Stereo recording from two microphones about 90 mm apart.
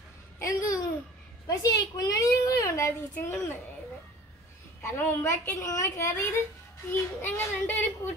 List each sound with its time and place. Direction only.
0.4 s a sound: 40° left (ahead or behind)
1.5 s a child's voice: 40° left (ahead or behind)
4.9 s a woman's voice: 30° left (ahead or behind)